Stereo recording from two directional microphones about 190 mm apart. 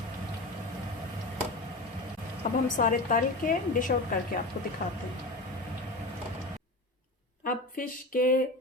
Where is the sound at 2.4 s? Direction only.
40° left (ahead or behind).